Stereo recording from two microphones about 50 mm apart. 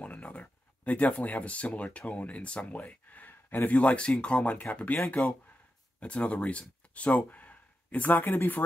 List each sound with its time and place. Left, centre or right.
0.0 s speech: left
3.7 s speech: left
5.9 s speech: left